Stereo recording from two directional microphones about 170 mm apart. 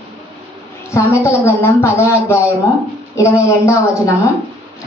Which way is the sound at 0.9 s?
15° left (ahead or behind).